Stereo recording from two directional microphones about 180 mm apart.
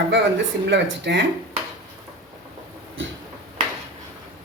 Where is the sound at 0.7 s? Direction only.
75° right (ahead or behind).